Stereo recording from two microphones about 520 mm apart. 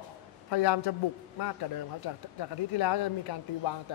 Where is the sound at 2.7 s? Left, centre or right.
Left.